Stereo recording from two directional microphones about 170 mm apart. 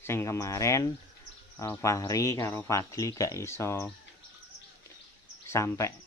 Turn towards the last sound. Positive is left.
turn(degrees=15)  # may be behind; listen again after turning